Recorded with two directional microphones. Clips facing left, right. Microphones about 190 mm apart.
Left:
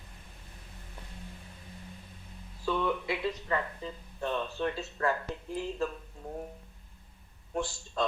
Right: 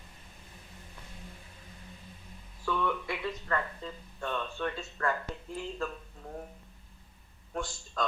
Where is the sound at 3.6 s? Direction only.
20° left (ahead or behind).